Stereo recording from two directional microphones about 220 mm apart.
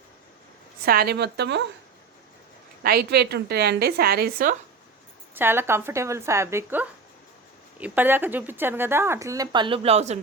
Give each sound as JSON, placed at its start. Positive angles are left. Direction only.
{"t": 0.9, "sound": "a woman's voice", "side_deg": -45}
{"t": 2.8, "sound": "a woman's voice", "side_deg": -45}
{"t": 5.3, "sound": "speech", "side_deg": -10}